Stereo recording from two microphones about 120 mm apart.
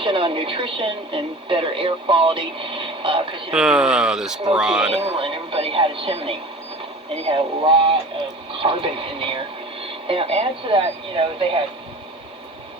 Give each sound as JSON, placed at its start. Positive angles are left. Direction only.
{"t": 0.0, "sound": "speech", "side_deg": -50}
{"t": 3.5, "sound": "speech", "side_deg": -5}
{"t": 5.1, "sound": "speech", "side_deg": -50}